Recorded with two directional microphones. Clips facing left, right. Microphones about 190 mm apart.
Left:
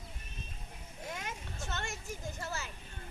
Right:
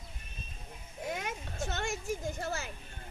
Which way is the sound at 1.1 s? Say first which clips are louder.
Right 5 dB; 55° right (ahead or behind).